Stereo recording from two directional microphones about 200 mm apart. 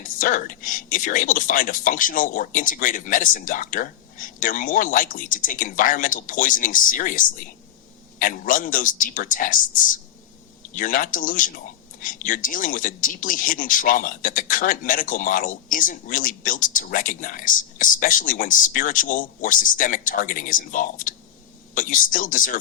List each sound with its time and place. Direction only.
0.2 s a man's voice: 40° left (ahead or behind)